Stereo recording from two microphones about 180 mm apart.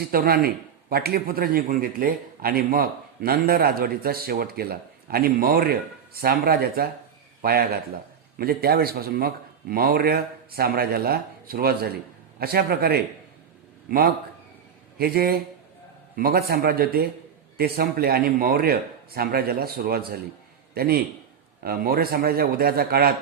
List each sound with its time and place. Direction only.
0.1 s a man's voice: 55° right (ahead or behind)